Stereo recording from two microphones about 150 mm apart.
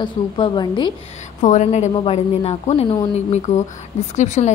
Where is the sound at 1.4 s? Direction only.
55° left (ahead or behind).